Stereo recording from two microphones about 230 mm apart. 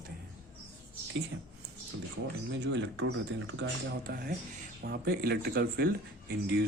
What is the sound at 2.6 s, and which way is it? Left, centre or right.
Speech, right.